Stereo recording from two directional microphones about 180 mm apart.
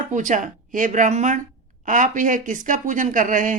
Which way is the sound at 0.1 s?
45° right (ahead or behind).